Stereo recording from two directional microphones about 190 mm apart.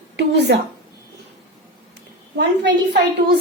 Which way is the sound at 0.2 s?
65° right (ahead or behind).